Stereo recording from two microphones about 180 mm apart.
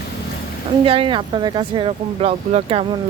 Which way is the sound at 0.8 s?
30° right (ahead or behind).